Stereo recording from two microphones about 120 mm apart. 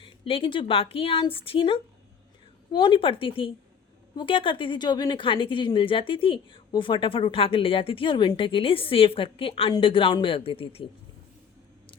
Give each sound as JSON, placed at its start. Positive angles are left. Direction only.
{"t": 0.0, "sound": "a woman's voice", "side_deg": 45}